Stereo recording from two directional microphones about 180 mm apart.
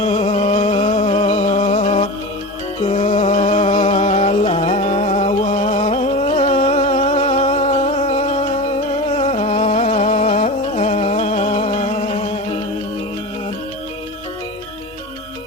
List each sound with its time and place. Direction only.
0.1 s music: 35° left (ahead or behind)